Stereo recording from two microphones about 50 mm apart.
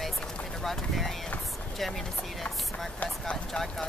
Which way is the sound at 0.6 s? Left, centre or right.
Centre.